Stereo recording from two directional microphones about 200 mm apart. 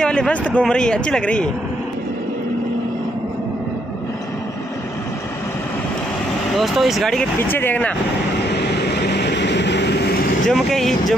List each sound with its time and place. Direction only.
0.0 s speech: 5° left (ahead or behind)
6.5 s speech: centre (ahead or behind)
8.5 s vehicle: 55° left (ahead or behind)
10.5 s speech: centre (ahead or behind)